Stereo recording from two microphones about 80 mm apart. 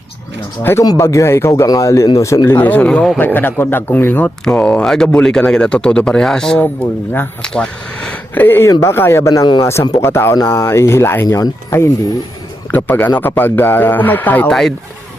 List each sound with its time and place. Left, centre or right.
0.6 s speech: left
2.6 s speech: centre
4.8 s speech: centre; by 11.9 s left
12.7 s speech: left